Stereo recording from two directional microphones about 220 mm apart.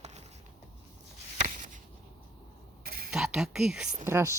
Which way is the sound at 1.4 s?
35° right (ahead or behind).